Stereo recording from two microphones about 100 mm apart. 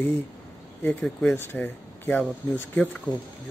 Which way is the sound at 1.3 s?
20° left (ahead or behind).